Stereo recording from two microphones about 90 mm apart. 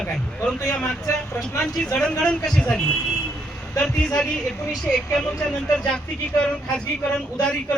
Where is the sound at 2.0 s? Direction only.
10° left (ahead or behind).